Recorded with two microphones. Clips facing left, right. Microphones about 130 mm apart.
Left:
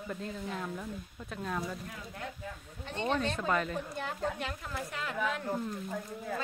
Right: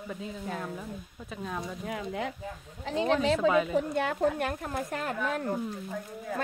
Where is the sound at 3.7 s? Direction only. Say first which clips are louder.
Right 9 dB; 70° right (ahead or behind); by 5.5 s 45° right (ahead or behind).